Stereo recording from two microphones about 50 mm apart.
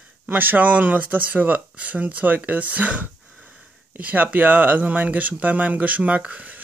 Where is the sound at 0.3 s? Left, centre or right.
Right.